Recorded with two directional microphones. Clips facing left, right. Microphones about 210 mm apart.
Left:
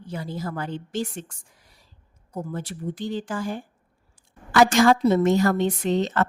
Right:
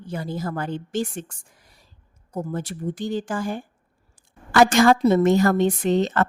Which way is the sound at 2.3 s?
45° right (ahead or behind).